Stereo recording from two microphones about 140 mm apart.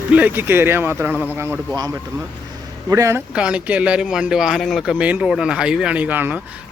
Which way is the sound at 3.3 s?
5° right (ahead or behind).